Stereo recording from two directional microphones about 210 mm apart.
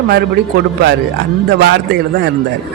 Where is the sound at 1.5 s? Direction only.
55° right (ahead or behind).